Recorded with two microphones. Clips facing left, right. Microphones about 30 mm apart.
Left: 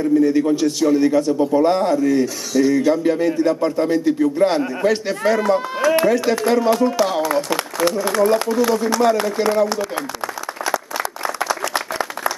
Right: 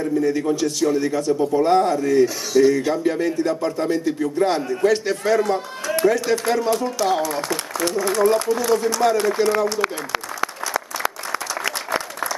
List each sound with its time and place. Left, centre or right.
0.2 s speech: centre
2.2 s speech: centre
6.7 s speech: centre
7.4 s a sound: centre
8.0 s speech: centre
9.8 s speech: right